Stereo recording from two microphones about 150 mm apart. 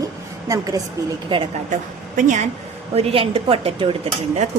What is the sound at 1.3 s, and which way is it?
Speech, 30° right (ahead or behind).